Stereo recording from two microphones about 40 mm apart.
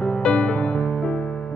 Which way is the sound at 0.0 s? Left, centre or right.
Left.